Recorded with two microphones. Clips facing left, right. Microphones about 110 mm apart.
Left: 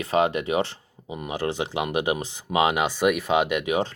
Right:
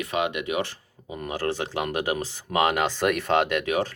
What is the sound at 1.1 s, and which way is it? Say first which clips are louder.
Speech: even; 15° left (ahead or behind).